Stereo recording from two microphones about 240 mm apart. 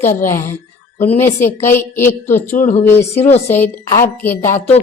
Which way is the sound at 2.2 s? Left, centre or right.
Left.